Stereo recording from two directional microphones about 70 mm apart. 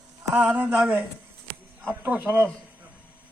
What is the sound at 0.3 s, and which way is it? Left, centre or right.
Speech, right.